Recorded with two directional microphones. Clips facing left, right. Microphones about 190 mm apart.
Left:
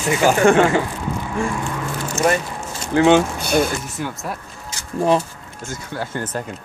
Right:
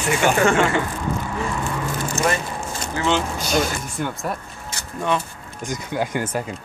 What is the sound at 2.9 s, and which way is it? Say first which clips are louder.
Speech: left 9 dB; 60° left (ahead or behind).